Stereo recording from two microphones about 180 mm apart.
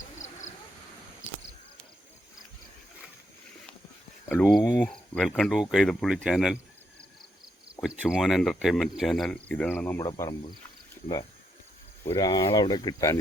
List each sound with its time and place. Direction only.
4.3 s speech: 10° left (ahead or behind)
7.8 s speech: 5° right (ahead or behind); by 10.3 s 20° left (ahead or behind)
12.0 s speech: 20° left (ahead or behind)